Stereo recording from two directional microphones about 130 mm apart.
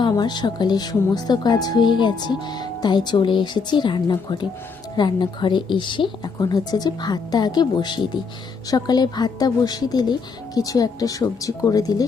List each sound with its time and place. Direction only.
0.0 s speech: 35° left (ahead or behind)